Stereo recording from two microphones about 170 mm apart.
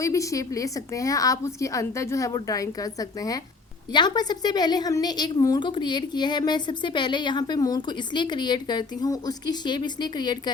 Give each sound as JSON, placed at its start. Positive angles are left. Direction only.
{"t": 0.0, "sound": "a woman's voice", "side_deg": 20}